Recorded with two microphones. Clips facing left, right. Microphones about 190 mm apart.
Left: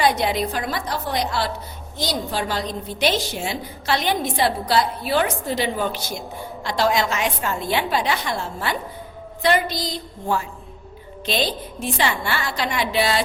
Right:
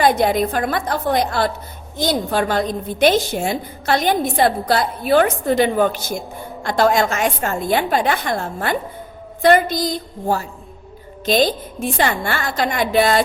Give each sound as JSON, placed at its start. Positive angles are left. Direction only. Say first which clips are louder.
{"t": 0.0, "sound": "a woman's voice", "louder": "right 4 dB", "side_deg": -50}